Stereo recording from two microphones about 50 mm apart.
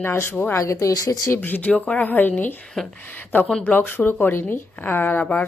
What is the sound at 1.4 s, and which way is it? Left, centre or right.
Speech, left.